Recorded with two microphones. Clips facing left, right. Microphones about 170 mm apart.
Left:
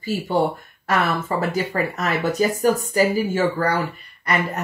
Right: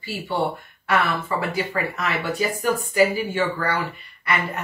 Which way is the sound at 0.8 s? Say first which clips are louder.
Left 1 dB; 40° left (ahead or behind).